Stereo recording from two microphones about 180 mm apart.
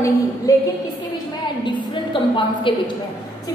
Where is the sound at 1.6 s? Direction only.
25° left (ahead or behind).